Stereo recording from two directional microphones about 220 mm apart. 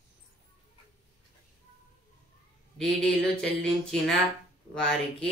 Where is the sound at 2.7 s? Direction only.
5° left (ahead or behind).